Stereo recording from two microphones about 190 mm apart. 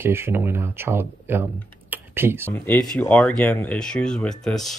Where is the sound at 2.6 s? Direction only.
5° left (ahead or behind).